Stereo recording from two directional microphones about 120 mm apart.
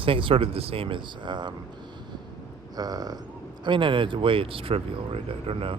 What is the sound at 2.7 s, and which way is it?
Speech, 35° right (ahead or behind).